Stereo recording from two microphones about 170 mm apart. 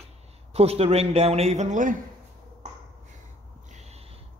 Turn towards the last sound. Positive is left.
turn(degrees=-40)  # may be behind; listen again after turning